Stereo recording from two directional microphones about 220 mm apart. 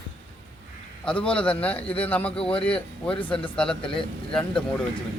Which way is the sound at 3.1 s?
25° left (ahead or behind).